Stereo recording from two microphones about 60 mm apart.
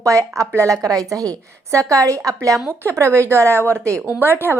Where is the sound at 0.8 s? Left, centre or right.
Right.